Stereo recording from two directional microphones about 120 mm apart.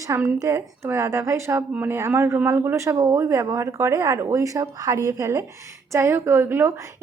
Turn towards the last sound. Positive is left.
turn(degrees=-20)  # may be behind; listen again after turning